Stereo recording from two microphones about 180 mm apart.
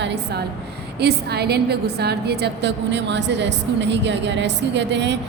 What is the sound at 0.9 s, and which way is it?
A woman's voice, 65° right (ahead or behind).